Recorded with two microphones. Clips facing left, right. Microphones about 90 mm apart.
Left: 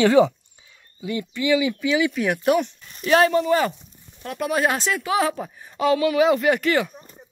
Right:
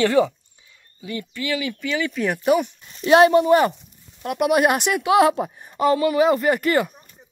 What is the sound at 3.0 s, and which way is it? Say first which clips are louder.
Speech: right 4 dB; 25° right (ahead or behind).